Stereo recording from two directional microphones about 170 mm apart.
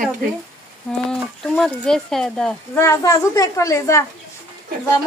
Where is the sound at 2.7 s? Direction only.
15° left (ahead or behind).